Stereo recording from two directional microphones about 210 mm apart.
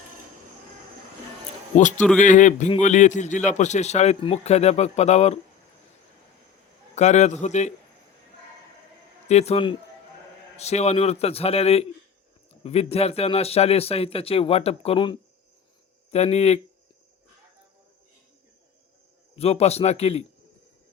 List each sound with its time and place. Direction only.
2.2 s a man's voice: 35° left (ahead or behind)
6.9 s a man's voice: 35° left (ahead or behind)
9.2 s a man's voice: 30° left (ahead or behind)
19.4 s speech: 30° left (ahead or behind)